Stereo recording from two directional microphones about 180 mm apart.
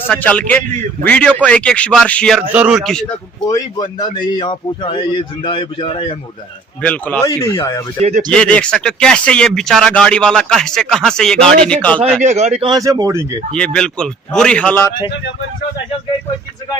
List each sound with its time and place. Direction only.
0.1 s a man's voice: 5° left (ahead or behind)
2.5 s speech: 5° right (ahead or behind)
3.5 s speech: 25° left (ahead or behind)
6.8 s a man's voice: 10° left (ahead or behind)
7.3 s speech: 20° left (ahead or behind)
8.3 s speech: 5° left (ahead or behind)
12.2 s a man's voice: 40° right (ahead or behind)
12.7 s speech: 20° right (ahead or behind)
13.5 s speech: 5° left (ahead or behind)